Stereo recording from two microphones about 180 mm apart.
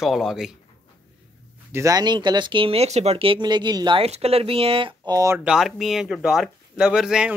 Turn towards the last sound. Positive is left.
turn(degrees=-5)  # may be behind; listen again after turning